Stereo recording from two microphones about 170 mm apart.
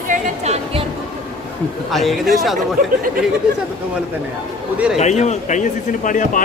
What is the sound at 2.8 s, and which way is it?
Speech, 55° right (ahead or behind).